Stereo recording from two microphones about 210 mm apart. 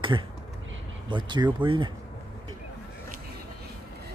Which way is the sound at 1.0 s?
20° right (ahead or behind).